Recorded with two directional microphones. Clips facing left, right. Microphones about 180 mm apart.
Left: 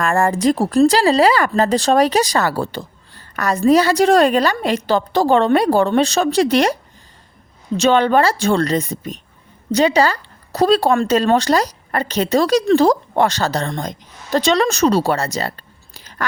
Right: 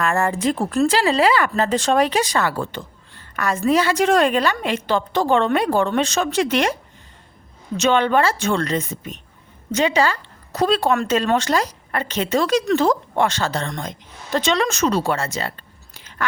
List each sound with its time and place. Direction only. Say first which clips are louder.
0.0 s speech: left 4 dB; 40° left (ahead or behind)
7.8 s speech: left 3 dB; 35° left (ahead or behind)